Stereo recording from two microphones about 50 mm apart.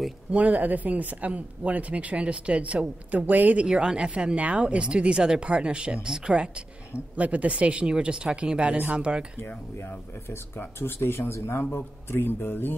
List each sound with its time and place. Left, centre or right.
0.3 s speech: right
3.6 s speech: centre
6.0 s speech: centre
7.2 s speech: right
10.8 s speech: left